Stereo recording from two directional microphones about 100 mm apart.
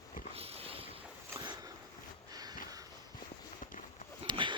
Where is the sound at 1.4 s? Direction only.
45° right (ahead or behind).